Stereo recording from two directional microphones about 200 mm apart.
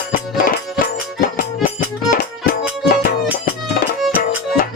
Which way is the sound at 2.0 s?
45° left (ahead or behind).